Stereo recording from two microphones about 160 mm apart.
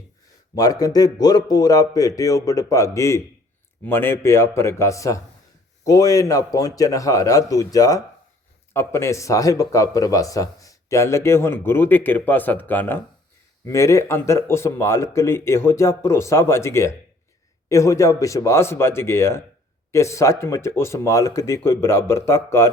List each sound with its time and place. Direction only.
0.5 s a man's voice: 25° left (ahead or behind)